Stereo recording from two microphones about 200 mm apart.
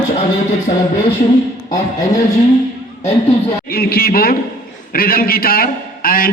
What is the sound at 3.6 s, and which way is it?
A man's voice, 50° left (ahead or behind).